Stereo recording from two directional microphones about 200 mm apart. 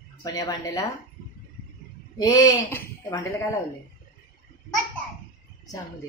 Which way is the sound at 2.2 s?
20° left (ahead or behind).